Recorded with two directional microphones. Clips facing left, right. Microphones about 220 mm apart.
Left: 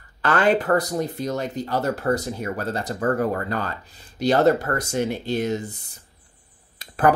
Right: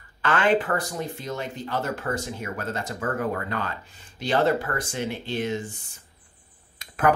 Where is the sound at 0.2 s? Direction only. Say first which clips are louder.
Left 2 dB; 40° left (ahead or behind).